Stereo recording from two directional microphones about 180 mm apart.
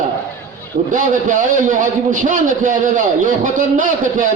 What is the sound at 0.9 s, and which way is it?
A man's voice, 45° right (ahead or behind).